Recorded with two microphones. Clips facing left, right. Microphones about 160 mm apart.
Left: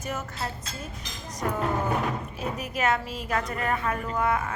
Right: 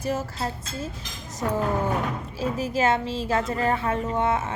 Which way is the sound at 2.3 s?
30° right (ahead or behind).